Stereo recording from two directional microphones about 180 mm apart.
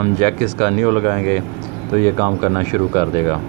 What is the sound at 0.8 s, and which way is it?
Speech, 40° right (ahead or behind).